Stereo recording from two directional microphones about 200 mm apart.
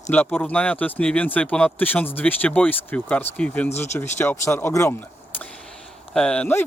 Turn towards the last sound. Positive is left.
turn(degrees=10)  # may be behind; listen again after turning